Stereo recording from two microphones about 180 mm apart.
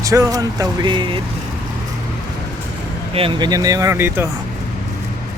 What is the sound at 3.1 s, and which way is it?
Speech, 30° right (ahead or behind).